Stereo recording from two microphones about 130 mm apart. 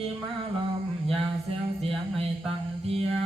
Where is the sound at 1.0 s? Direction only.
50° right (ahead or behind).